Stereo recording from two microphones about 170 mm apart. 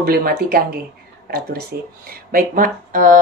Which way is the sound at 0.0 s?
60° right (ahead or behind).